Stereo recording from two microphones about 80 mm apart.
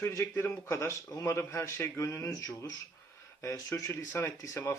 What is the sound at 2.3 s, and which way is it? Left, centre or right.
Speech, left.